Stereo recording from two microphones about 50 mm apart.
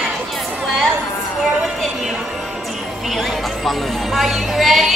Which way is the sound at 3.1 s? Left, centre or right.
Centre.